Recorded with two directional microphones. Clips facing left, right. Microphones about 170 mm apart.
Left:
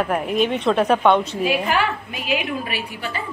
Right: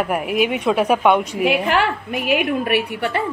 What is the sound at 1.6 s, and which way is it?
Speech, 65° right (ahead or behind).